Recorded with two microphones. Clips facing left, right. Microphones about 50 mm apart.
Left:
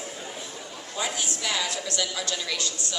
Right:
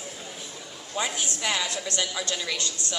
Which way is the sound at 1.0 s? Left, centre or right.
Right.